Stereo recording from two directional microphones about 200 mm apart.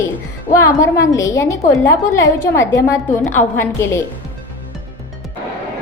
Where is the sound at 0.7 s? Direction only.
15° left (ahead or behind).